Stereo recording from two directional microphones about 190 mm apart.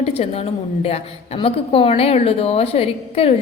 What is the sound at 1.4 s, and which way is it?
A woman's voice, 30° left (ahead or behind).